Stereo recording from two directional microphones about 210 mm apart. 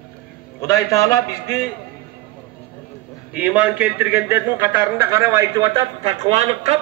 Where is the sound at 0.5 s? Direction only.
15° left (ahead or behind).